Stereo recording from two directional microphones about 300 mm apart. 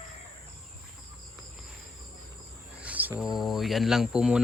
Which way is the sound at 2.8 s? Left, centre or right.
Centre.